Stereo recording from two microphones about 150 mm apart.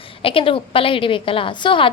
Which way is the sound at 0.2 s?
35° left (ahead or behind).